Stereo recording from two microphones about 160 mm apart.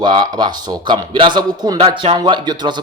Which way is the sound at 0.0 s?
30° right (ahead or behind).